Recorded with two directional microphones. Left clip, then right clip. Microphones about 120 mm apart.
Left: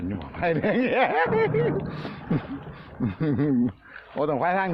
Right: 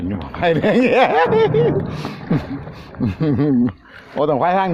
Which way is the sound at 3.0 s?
10° right (ahead or behind).